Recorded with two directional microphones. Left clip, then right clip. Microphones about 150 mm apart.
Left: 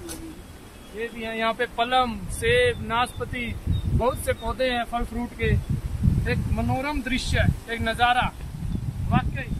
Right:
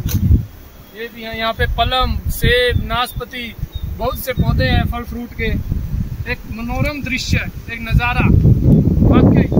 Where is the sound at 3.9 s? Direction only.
40° right (ahead or behind).